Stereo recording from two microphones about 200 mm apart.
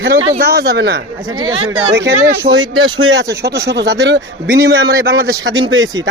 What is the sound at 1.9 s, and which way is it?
Speech, 65° right (ahead or behind).